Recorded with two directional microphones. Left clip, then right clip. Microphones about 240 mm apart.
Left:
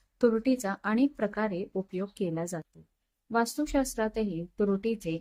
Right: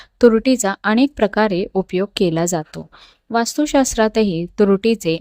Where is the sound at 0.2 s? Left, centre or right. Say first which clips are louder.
Right 13 dB; right.